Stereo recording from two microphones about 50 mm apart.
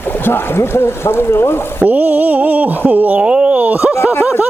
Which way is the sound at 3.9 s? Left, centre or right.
Left.